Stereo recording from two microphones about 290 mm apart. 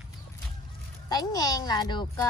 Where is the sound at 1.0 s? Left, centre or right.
Centre.